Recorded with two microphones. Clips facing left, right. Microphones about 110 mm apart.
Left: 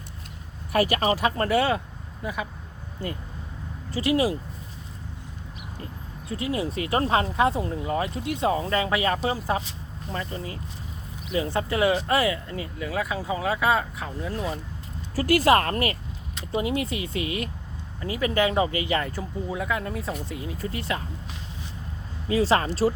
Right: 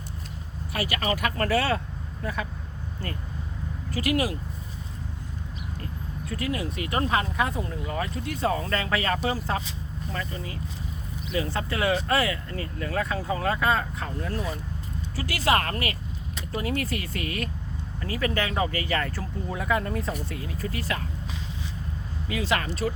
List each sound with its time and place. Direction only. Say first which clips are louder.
0.7 s speech: left 6 dB; 40° left (ahead or behind); by 2.5 s 15° left (ahead or behind)
3.9 s speech: left 3 dB; 30° left (ahead or behind)
6.2 s speech: left 2 dB; 25° left (ahead or behind)
11.3 s speech: left 3 dB; 20° left (ahead or behind)
15.1 s speech: left 6 dB; 45° left (ahead or behind)
16.5 s speech: left 3 dB; 20° left (ahead or behind)
19.5 s speech: right 3 dB; centre (ahead or behind)
20.2 s speech: left 1 dB; 20° left (ahead or behind)
22.3 s speech: left 6 dB; 35° left (ahead or behind)